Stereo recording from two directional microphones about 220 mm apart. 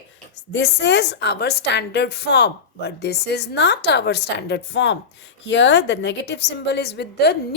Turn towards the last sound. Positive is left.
turn(degrees=50)  # may be behind; listen again after turning